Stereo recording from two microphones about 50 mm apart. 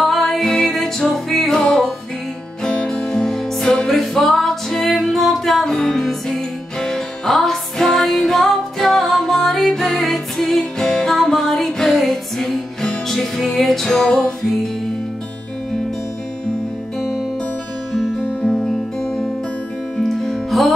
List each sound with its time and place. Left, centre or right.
0.0 s music: centre
2.6 s music: centre
18.4 s music: centre